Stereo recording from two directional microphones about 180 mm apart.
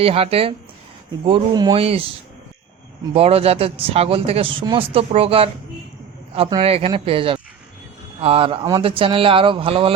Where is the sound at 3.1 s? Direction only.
35° right (ahead or behind).